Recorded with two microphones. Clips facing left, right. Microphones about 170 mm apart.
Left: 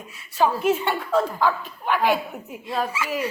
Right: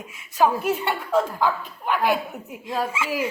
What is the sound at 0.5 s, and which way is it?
A woman's voice, 10° right (ahead or behind).